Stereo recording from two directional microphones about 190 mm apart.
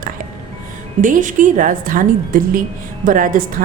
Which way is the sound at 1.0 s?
45° right (ahead or behind).